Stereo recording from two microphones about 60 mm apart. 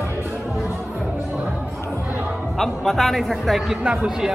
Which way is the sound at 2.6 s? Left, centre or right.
Centre.